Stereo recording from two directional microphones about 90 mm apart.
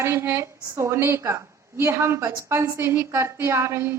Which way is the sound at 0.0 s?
30° right (ahead or behind).